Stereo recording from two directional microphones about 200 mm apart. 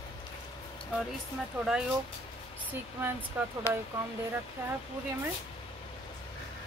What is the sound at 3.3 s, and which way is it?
Speech, 10° right (ahead or behind).